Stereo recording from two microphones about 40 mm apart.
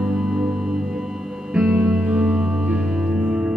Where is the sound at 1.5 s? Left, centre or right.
Right.